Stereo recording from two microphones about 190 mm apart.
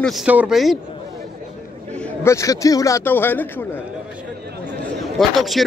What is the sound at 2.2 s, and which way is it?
A man's voice, 15° left (ahead or behind).